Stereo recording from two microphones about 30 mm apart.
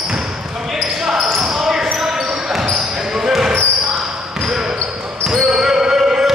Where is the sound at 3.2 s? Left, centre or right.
Centre.